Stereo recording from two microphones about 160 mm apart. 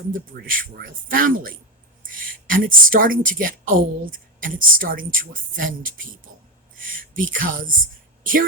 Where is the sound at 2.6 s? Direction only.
60° right (ahead or behind).